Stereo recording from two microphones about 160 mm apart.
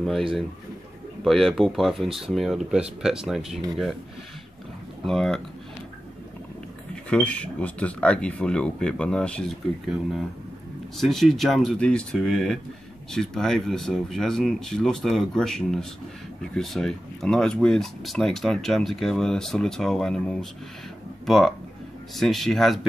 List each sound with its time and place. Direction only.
1.2 s speech: centre (ahead or behind)
5.0 s speech: 5° left (ahead or behind)
7.1 s speech: 5° left (ahead or behind)
11.0 s speech: centre (ahead or behind)